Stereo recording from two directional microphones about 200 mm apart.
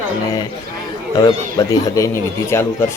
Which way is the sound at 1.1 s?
20° left (ahead or behind).